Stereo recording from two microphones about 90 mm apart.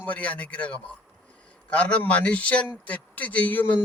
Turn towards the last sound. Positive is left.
turn(degrees=20)  # may be behind; listen again after turning